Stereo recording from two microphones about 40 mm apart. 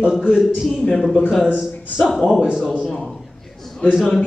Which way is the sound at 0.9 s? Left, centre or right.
Centre.